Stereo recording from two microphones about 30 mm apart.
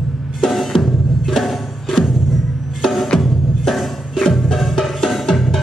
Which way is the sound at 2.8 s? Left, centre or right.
Centre.